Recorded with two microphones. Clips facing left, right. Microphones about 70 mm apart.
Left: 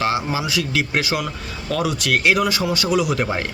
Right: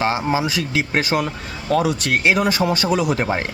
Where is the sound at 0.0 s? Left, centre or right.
Right.